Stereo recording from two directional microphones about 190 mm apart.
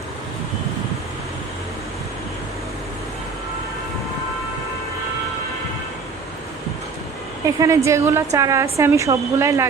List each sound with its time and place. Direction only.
7.4 s speech: 15° right (ahead or behind)